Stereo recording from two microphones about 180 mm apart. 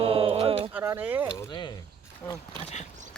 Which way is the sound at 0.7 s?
15° right (ahead or behind).